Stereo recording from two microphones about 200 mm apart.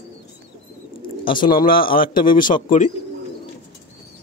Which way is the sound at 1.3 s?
45° left (ahead or behind).